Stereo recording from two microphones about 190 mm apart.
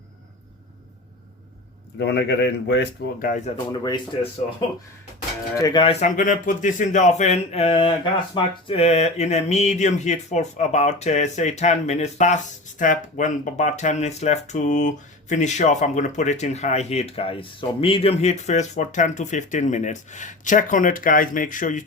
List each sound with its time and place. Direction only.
2.0 s speech: 65° left (ahead or behind); by 3.5 s 45° left (ahead or behind)
3.7 s speech: 25° left (ahead or behind)
5.5 s speech: 20° left (ahead or behind); by 21.8 s 45° left (ahead or behind)